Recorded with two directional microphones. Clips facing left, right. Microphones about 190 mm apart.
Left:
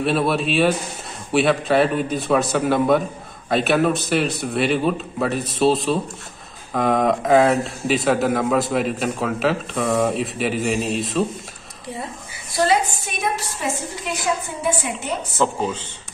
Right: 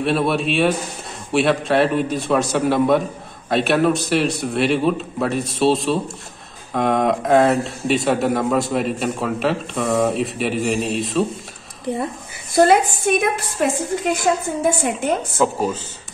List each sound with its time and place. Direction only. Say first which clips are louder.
0.0 s speech: right 1 dB; centre (ahead or behind)
12.5 s a woman's voice: right 5 dB; 55° right (ahead or behind)
15.3 s speech: right 2 dB; 5° right (ahead or behind)